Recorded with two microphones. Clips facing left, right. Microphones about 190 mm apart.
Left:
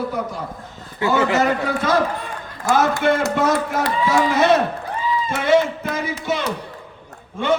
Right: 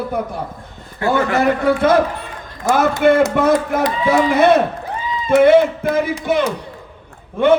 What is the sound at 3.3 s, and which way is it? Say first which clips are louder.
Speech: right 4 dB; 55° right (ahead or behind).